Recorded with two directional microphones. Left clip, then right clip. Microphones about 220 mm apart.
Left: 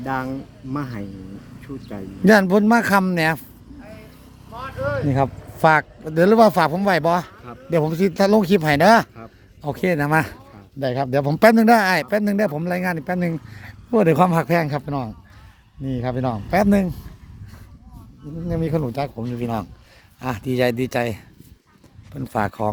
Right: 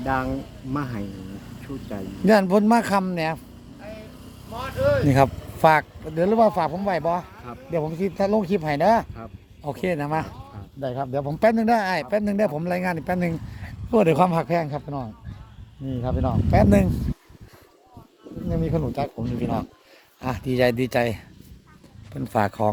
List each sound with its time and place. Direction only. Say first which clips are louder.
0.0 s speech: right 1 dB; 15° left (ahead or behind); by 3.4 s 30° left (ahead or behind)
3.8 s vehicle: right 3 dB; 35° right (ahead or behind)
5.0 s speech: right 1 dB; 5° left (ahead or behind)
5.3 s a sound: right 1 dB; 50° right (ahead or behind)
5.5 s speech: left 2 dB; 15° left (ahead or behind)
6.1 s speech: left 5 dB; 35° left (ahead or behind)
9.6 s speech: left 5 dB; 25° left (ahead or behind)
10.8 s speech: left 6 dB; 50° left (ahead or behind); by 16.6 s 30° left (ahead or behind)
16.6 s speech: even; 10° left (ahead or behind)
18.4 s speech: left 3 dB; 30° left (ahead or behind); by 22.7 s 10° left (ahead or behind)